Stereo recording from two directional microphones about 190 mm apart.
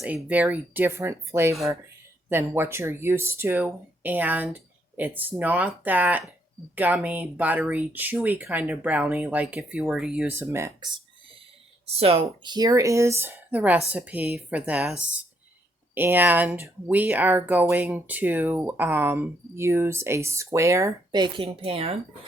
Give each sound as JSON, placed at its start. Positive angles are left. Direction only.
{"t": 0.2, "sound": "speech", "side_deg": -10}